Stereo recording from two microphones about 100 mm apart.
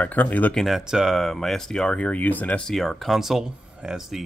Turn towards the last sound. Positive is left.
turn(degrees=-5)  # may be behind; listen again after turning